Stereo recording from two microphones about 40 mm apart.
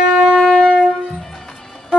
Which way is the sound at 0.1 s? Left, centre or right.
Right.